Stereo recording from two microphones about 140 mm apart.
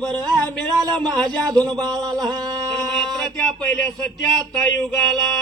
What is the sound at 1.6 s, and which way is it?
Speech, 30° right (ahead or behind).